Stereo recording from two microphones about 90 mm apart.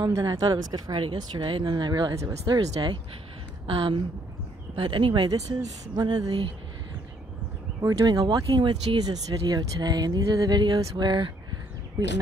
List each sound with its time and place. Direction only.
0.2 s speech: 45° right (ahead or behind)
1.1 s speech: 55° right (ahead or behind)
3.6 s speech: 85° right
4.7 s speech: 70° right (ahead or behind)
5.9 s speech: 50° right (ahead or behind)
7.8 s speech: 45° right (ahead or behind)